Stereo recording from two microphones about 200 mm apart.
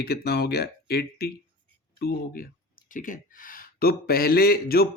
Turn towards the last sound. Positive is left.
turn(degrees=50)  # may be behind; listen again after turning